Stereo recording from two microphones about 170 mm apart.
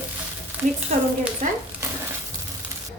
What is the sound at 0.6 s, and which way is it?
Speech, 10° right (ahead or behind).